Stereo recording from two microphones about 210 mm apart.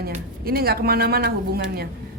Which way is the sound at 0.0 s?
45° right (ahead or behind).